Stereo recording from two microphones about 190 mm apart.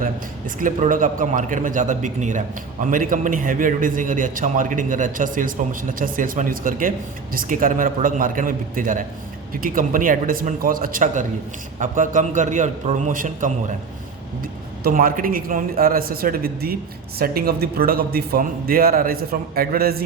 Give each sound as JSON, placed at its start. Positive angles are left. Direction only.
{"t": 0.0, "sound": "a man's voice", "side_deg": -45}
{"t": 14.8, "sound": "a man's voice", "side_deg": -45}